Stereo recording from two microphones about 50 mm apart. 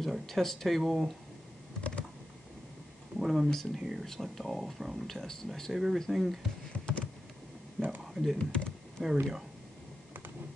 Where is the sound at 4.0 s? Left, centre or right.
Centre.